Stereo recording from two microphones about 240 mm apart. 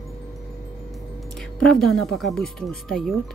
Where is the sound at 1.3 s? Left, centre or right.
Centre.